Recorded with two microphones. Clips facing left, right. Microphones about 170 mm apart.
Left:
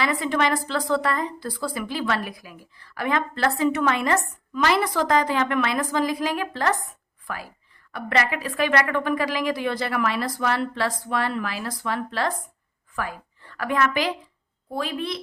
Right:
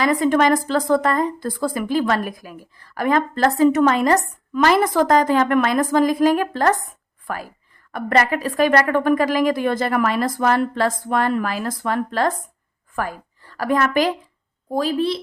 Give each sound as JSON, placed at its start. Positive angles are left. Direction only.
{"t": 0.0, "sound": "a woman's voice", "side_deg": -45}